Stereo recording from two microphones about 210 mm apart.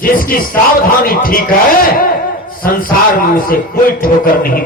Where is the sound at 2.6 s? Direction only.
40° left (ahead or behind).